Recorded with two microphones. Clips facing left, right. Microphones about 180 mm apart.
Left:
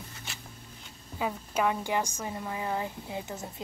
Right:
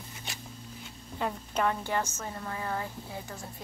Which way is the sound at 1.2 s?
5° left (ahead or behind).